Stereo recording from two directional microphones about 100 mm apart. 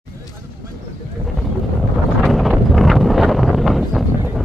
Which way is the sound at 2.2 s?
Centre (ahead or behind).